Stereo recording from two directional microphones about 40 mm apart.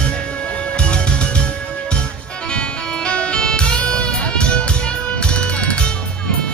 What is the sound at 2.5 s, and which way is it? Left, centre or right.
Music, left.